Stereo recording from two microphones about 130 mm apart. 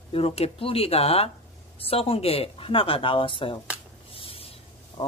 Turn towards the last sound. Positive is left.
turn(degrees=45)  # may be behind; listen again after turning